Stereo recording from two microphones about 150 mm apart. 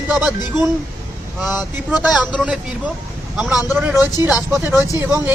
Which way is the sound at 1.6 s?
Centre (ahead or behind).